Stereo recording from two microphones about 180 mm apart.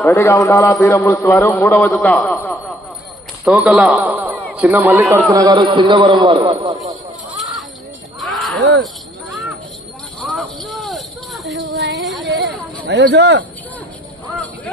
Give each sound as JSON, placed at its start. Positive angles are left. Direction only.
{"t": 0.0, "sound": "a man's voice", "side_deg": 15}
{"t": 2.0, "sound": "a man's voice", "side_deg": 0}
{"t": 8.2, "sound": "a sound", "side_deg": 0}
{"t": 8.5, "sound": "jingle bell", "side_deg": -70}
{"t": 10.2, "sound": "jingle bell", "side_deg": 0}
{"t": 11.7, "sound": "music", "side_deg": 0}
{"t": 12.3, "sound": "a sound", "side_deg": -80}